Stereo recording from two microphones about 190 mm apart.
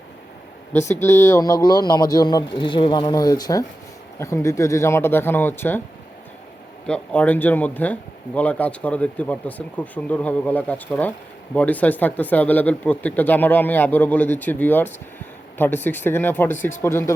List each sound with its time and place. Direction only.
0.9 s speech: 15° left (ahead or behind)
6.8 s speech: 5° left (ahead or behind)